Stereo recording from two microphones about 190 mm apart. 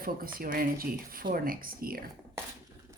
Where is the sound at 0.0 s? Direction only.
50° right (ahead or behind).